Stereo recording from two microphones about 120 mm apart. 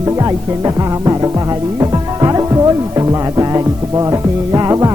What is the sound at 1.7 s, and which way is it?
Music, 30° right (ahead or behind).